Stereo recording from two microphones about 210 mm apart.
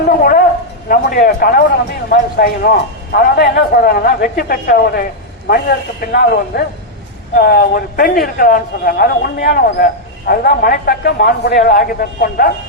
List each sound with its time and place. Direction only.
0.2 s a man's voice: 45° left (ahead or behind)